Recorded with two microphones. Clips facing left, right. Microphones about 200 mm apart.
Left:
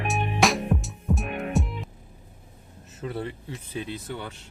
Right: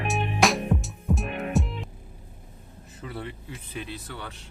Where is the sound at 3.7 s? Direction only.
20° left (ahead or behind).